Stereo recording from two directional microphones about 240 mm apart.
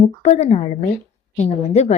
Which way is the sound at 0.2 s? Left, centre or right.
Left.